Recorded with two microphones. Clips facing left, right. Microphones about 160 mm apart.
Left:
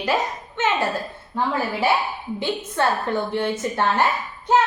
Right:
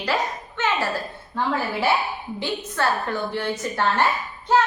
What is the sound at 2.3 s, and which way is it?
A woman's voice, 20° left (ahead or behind).